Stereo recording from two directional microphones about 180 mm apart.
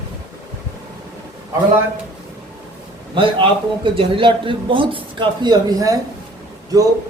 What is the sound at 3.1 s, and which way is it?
A man's voice, 30° right (ahead or behind).